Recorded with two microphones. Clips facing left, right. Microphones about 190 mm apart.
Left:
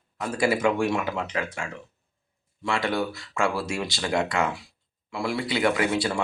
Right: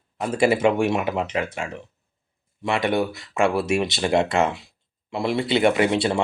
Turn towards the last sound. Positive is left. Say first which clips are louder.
# right 4 dB
turn(degrees=-25)  # may be behind; listen again after turning